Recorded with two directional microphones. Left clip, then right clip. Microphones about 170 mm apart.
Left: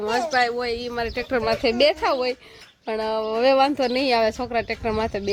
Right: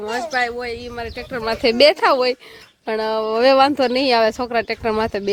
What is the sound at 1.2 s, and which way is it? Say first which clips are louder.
Speech: left 5 dB; 55° left (ahead or behind).